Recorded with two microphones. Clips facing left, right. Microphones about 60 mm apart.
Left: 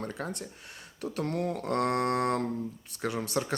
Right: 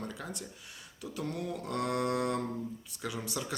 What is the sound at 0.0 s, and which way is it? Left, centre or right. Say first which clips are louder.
Speech: left 5 dB; left.